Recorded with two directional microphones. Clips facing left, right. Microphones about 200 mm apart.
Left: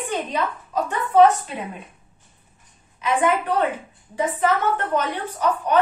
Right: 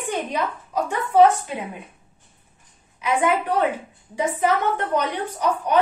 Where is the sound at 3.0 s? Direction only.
10° right (ahead or behind).